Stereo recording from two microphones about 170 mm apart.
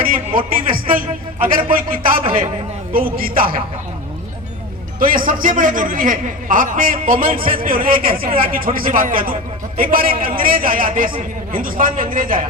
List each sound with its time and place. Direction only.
0.3 s a sound: 55° right (ahead or behind)
1.6 s a man's voice: 55° right (ahead or behind)
4.9 s a man's voice: 55° right (ahead or behind)